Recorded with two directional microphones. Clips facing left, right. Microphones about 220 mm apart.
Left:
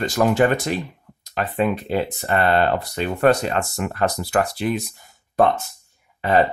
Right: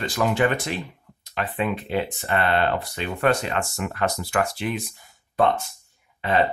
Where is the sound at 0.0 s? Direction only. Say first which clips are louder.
Left 4 dB; 40° left (ahead or behind).